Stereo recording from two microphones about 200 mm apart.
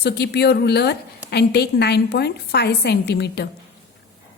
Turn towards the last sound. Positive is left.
turn(degrees=55)  # may be behind; listen again after turning